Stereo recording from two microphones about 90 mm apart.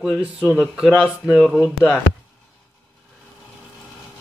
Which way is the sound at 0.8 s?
20° left (ahead or behind).